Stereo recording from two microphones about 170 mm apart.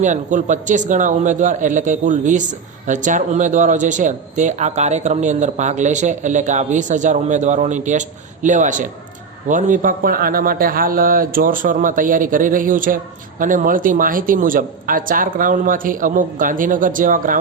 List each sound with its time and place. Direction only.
0.0 s a man's voice: 45° right (ahead or behind)